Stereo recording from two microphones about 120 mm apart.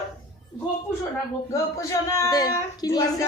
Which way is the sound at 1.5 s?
25° left (ahead or behind).